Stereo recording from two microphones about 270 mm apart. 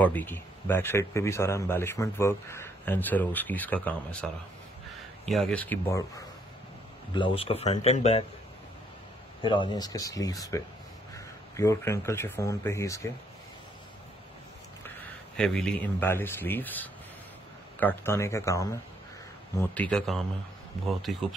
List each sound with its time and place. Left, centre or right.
0.0 s a man's voice: centre
7.2 s speech: left
9.4 s a man's voice: centre
15.3 s a man's voice: centre